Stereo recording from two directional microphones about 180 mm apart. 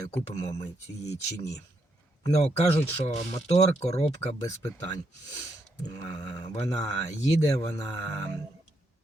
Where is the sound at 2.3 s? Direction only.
35° left (ahead or behind).